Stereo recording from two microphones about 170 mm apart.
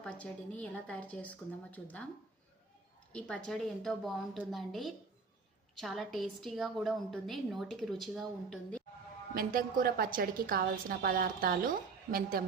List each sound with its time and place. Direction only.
0.0 s speech: 5° left (ahead or behind)
3.1 s a woman's voice: 5° left (ahead or behind)
9.3 s a woman's voice: 55° right (ahead or behind)